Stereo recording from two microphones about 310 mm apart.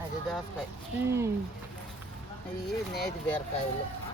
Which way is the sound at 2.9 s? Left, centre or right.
Left.